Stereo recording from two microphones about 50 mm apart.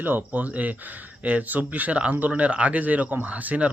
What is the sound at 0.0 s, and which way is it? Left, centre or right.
Speech, right.